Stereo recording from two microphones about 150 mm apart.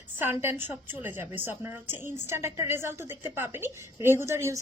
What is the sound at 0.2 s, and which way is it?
A woman's voice, 15° right (ahead or behind).